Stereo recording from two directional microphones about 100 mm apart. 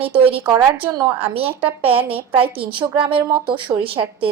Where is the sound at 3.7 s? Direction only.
40° right (ahead or behind).